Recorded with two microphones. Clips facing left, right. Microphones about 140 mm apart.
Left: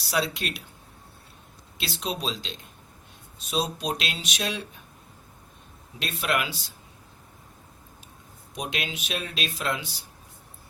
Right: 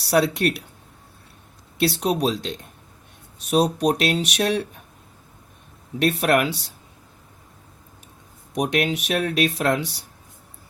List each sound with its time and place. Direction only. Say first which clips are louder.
0.1 s speech: right 9 dB; 65° right (ahead or behind)
1.8 s speech: right 11 dB; 65° right (ahead or behind)
6.0 s speech: right 9 dB; 65° right (ahead or behind)
8.5 s speech: right 11 dB; 70° right (ahead or behind)